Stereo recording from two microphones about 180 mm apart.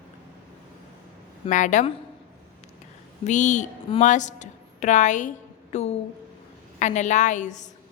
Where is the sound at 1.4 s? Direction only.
45° left (ahead or behind).